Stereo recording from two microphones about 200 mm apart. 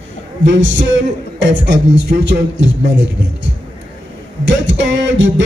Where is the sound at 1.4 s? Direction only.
65° right (ahead or behind).